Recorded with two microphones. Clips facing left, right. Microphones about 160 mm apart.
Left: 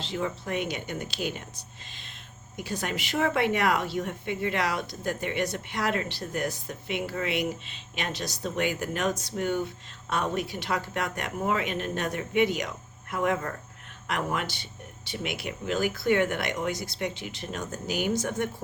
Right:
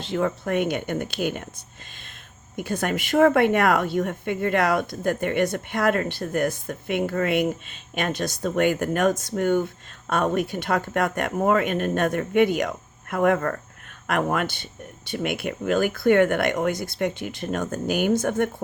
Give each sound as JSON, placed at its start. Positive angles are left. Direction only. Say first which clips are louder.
{"t": 0.0, "sound": "a woman's voice", "louder": "right 7 dB", "side_deg": -55}